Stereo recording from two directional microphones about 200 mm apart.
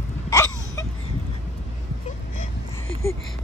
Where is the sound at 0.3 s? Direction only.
15° left (ahead or behind).